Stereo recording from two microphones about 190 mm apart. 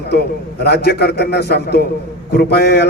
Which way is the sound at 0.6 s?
60° left (ahead or behind).